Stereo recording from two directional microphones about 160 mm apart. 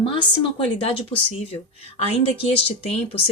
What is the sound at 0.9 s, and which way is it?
Speech, 40° left (ahead or behind).